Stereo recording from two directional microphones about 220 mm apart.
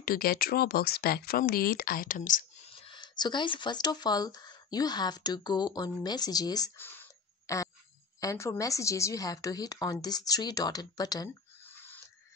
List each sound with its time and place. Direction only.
0.0 s speech: 45° left (ahead or behind)
2.9 s a woman's voice: 20° left (ahead or behind)